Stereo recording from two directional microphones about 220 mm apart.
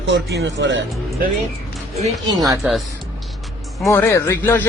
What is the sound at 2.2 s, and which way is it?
Speech, 20° right (ahead or behind).